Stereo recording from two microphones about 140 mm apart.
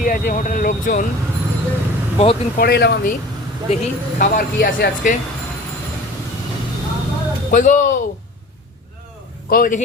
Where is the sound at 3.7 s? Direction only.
75° left (ahead or behind).